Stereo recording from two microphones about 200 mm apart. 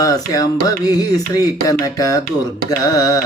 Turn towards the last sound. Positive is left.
turn(degrees=20)  # may be behind; listen again after turning